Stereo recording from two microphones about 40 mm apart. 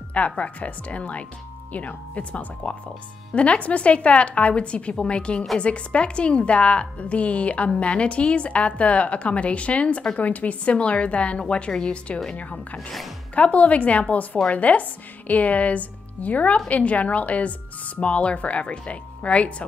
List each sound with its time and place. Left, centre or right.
0.1 s a woman's voice: left